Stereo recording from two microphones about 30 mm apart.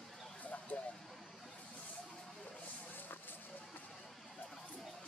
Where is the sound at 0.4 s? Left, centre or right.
Left.